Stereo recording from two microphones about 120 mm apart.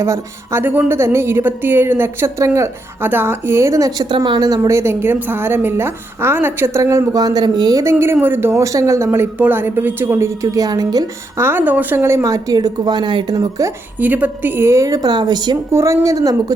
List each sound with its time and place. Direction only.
0.0 s a woman's voice: 20° right (ahead or behind)
11.3 s a woman's voice: 20° right (ahead or behind)
14.0 s a woman's voice: 15° right (ahead or behind); by 15.5 s 35° right (ahead or behind)
15.7 s a woman's voice: 25° right (ahead or behind)